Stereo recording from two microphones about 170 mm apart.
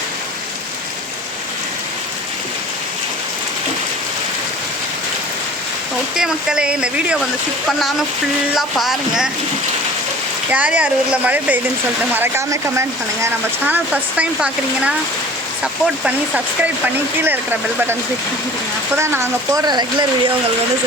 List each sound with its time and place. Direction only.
6.1 s speech: 5° right (ahead or behind)
10.5 s speech: 10° right (ahead or behind)
18.9 s speech: 15° right (ahead or behind)